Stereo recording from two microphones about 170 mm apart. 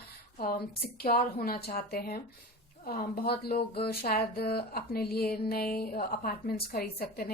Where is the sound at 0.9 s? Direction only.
60° left (ahead or behind).